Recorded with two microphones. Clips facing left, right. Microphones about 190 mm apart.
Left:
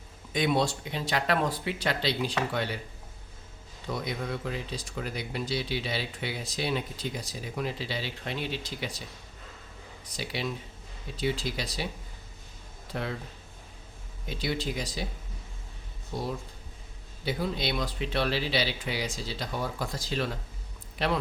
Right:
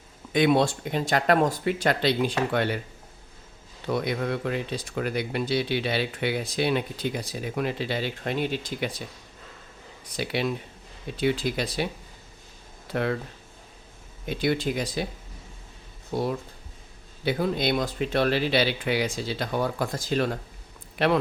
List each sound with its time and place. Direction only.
0.3 s speech: 60° right (ahead or behind)
3.8 s speech: 65° right (ahead or behind)
10.2 s speech: 60° right (ahead or behind)
12.9 s speech: 60° right (ahead or behind)
14.3 s speech: 55° right (ahead or behind)
16.1 s speech: 60° right (ahead or behind)